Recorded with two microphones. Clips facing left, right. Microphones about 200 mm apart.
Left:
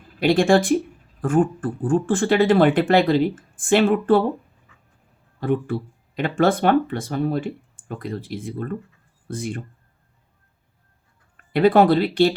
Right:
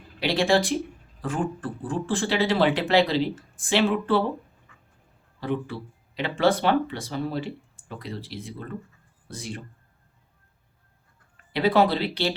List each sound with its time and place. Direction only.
0.2 s speech: 50° left (ahead or behind)
0.6 s speech: centre (ahead or behind)
1.2 s speech: 50° left (ahead or behind)
5.4 s speech: 50° left (ahead or behind)
11.5 s speech: 50° left (ahead or behind)